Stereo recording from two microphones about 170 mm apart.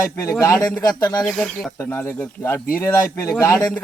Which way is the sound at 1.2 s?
5° left (ahead or behind).